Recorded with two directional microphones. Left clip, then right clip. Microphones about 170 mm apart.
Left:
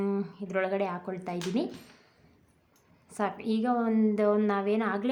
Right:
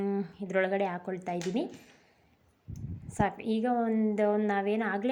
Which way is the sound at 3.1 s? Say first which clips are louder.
Right 1 dB; 15° right (ahead or behind).